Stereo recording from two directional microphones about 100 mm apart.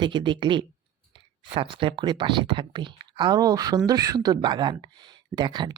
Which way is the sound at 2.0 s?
50° right (ahead or behind).